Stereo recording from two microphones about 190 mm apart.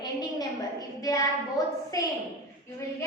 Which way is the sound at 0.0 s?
20° left (ahead or behind).